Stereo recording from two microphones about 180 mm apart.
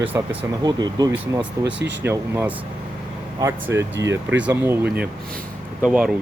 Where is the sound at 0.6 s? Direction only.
20° right (ahead or behind).